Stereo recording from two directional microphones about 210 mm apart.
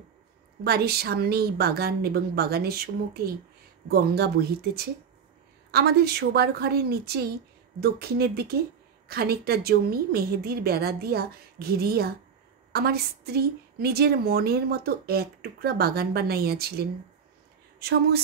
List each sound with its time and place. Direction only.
0.7 s a woman's voice: 50° right (ahead or behind)